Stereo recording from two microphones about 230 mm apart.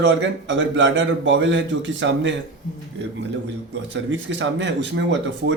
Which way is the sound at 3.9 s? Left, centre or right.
Right.